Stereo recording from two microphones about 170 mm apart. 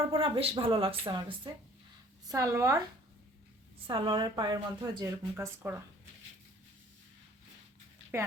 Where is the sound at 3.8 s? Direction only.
30° right (ahead or behind); by 5.8 s 15° right (ahead or behind).